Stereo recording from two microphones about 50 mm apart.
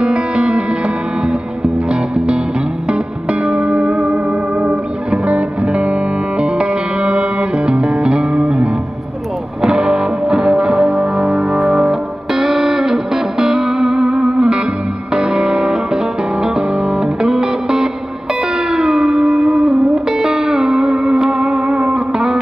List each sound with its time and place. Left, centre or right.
0.0 s music: right